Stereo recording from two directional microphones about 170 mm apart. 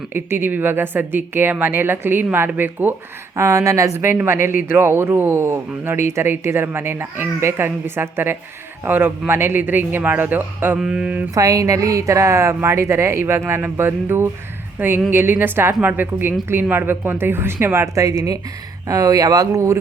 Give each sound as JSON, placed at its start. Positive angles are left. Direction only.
{"t": 0.1, "sound": "a woman's voice", "side_deg": -10}
{"t": 11.3, "sound": "a woman's voice", "side_deg": -20}